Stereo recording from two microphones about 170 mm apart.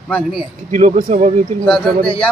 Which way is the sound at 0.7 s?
45° right (ahead or behind).